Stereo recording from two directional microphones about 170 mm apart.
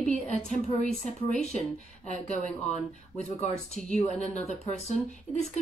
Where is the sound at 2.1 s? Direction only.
45° left (ahead or behind).